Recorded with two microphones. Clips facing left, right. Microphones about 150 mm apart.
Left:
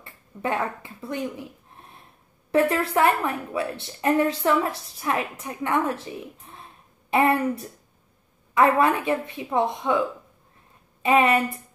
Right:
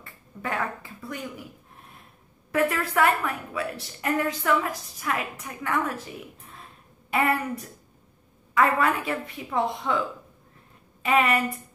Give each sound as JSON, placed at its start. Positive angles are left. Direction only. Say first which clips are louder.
{"t": 0.0, "sound": "speech", "louder": "left 5 dB", "side_deg": 25}
{"t": 2.5, "sound": "a woman's voice", "louder": "left 4 dB", "side_deg": 30}